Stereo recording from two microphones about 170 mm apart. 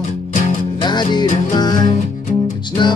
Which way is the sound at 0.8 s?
25° left (ahead or behind).